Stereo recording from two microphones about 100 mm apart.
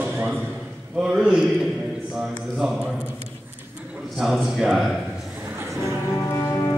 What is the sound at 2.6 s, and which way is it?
Speech, 5° right (ahead or behind).